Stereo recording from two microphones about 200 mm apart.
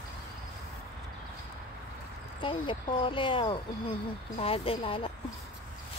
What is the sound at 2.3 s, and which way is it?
Speech, 25° left (ahead or behind).